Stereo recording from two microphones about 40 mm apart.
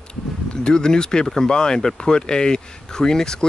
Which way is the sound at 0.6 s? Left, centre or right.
Centre.